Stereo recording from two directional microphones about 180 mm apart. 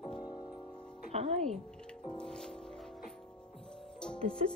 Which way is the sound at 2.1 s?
5° left (ahead or behind).